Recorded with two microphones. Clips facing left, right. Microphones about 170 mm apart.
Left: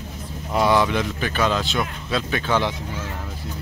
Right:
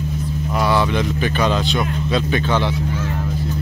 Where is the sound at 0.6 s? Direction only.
15° left (ahead or behind).